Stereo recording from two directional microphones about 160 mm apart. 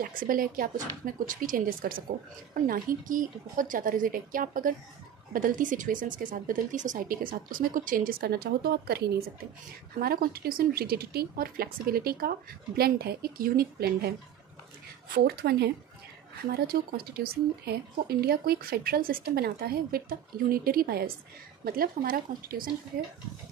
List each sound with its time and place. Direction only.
0.0 s speech: 60° right (ahead or behind); by 14.1 s 75° right (ahead or behind)
15.1 s speech: 85° right
16.5 s speech: 70° right (ahead or behind)